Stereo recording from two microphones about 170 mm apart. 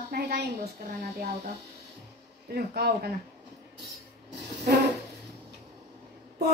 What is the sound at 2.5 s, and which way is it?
Speech, 70° right (ahead or behind).